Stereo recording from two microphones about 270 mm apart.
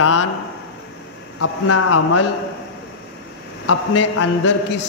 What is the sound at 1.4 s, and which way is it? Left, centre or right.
Speech, left.